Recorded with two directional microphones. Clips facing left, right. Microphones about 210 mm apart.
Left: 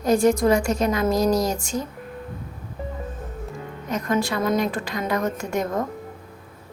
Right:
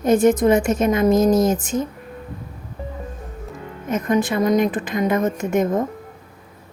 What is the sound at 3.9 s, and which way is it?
A woman's voice, 20° right (ahead or behind).